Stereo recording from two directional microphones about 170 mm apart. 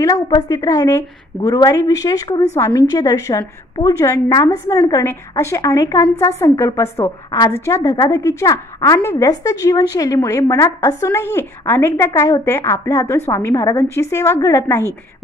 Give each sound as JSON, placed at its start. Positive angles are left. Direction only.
{"t": 0.0, "sound": "a woman's voice", "side_deg": 20}